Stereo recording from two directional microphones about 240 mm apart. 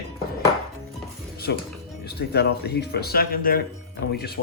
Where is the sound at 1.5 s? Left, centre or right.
Left.